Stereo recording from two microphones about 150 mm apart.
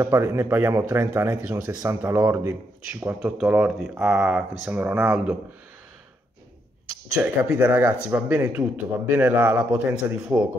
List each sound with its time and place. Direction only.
0.0 s speech: 20° right (ahead or behind)
1.7 s a man's voice: 25° right (ahead or behind)
3.2 s speech: 5° right (ahead or behind)
7.2 s speech: 10° right (ahead or behind)